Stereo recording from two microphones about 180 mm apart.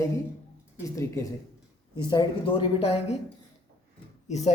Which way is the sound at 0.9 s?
15° left (ahead or behind).